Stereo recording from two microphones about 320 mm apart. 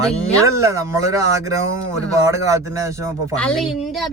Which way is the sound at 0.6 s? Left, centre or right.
Centre.